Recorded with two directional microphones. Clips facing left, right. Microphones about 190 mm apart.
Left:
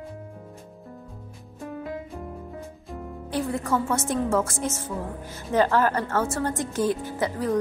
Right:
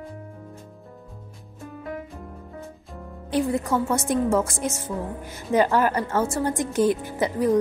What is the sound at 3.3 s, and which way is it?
A woman's voice, 15° right (ahead or behind).